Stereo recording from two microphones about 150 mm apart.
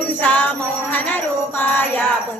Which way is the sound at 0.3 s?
10° left (ahead or behind).